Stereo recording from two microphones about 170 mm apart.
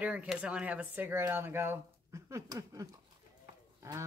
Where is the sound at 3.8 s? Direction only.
15° right (ahead or behind).